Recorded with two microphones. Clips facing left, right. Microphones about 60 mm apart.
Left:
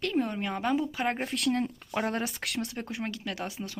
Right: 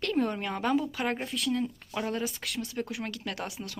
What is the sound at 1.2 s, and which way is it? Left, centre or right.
Speech, left.